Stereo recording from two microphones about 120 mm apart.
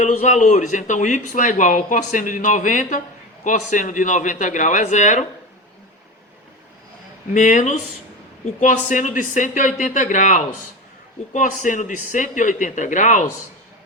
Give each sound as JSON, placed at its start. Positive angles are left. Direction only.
{"t": 0.0, "sound": "a man's voice", "side_deg": 90}
{"t": 7.3, "sound": "a man's voice", "side_deg": 90}